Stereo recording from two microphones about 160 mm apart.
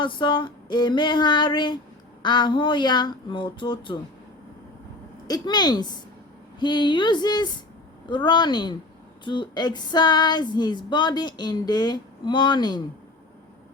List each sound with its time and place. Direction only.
0.0 s female singing: 30° left (ahead or behind)
5.3 s female singing: 25° left (ahead or behind)